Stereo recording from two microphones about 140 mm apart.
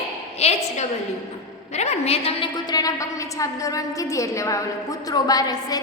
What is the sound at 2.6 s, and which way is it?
A woman's voice, 25° left (ahead or behind).